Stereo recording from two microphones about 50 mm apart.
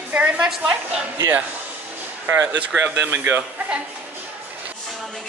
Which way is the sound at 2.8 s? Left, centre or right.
Right.